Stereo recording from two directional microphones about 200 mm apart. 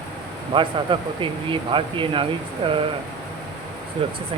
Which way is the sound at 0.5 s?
25° right (ahead or behind).